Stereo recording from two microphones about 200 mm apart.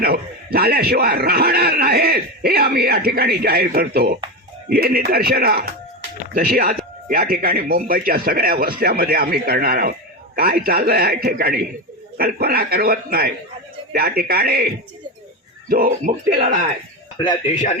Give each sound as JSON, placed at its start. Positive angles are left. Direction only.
{"t": 0.0, "sound": "a man's voice", "side_deg": -50}
{"t": 15.7, "sound": "a man's voice", "side_deg": -45}